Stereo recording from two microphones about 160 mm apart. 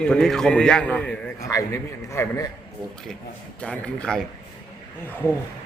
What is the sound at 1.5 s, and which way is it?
A man's voice, 20° left (ahead or behind).